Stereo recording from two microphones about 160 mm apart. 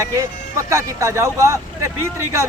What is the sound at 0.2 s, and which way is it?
Speech, 20° right (ahead or behind).